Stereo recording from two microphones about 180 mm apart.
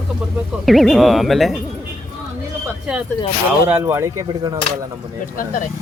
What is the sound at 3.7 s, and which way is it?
Speech, 15° right (ahead or behind).